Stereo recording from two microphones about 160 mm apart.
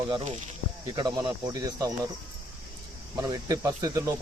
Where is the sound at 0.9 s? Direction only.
25° right (ahead or behind).